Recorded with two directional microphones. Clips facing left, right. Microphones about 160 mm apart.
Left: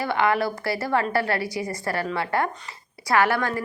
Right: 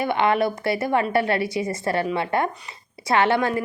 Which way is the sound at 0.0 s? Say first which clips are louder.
Right 2 dB; 20° right (ahead or behind).